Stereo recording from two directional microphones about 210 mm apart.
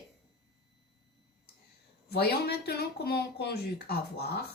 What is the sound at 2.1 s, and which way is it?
A woman's voice, 50° left (ahead or behind).